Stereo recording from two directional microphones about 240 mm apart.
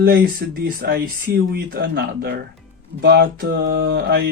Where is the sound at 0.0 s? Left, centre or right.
Right.